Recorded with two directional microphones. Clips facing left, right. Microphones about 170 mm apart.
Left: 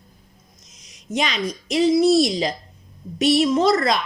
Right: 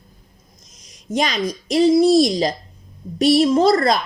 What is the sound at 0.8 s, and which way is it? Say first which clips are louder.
A woman's voice: right 3 dB; 40° right (ahead or behind).